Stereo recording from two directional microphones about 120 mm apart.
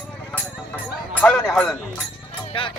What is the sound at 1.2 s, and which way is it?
Speech, 10° left (ahead or behind).